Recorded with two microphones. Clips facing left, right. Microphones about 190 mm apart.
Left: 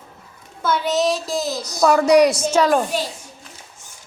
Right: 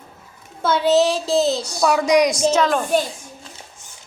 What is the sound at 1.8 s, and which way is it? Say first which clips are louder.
Speech: left 3 dB; 10° right (ahead or behind).